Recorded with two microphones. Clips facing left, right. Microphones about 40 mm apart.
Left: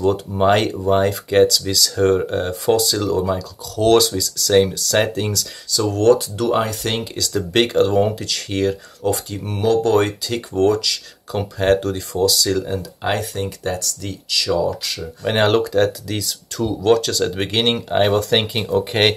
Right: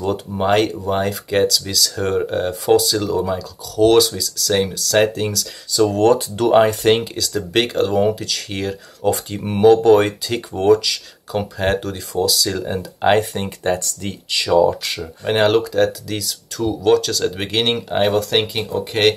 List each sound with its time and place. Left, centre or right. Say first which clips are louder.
0.0 s speech: left 3 dB; centre
5.7 s speech: right 1 dB; centre
7.2 s speech: left 1 dB; centre
9.3 s speech: right 9 dB; centre
12.6 s speech: right 5 dB; right
15.2 s speech: right 1 dB; centre